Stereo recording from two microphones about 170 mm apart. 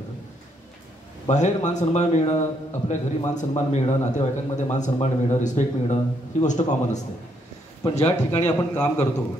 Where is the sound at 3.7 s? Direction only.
40° left (ahead or behind).